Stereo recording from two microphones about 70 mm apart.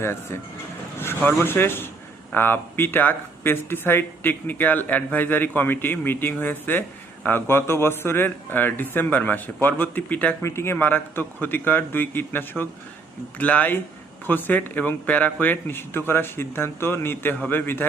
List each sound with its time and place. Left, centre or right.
0.0 s speech: left
1.4 s speech: left
10.4 s speech: left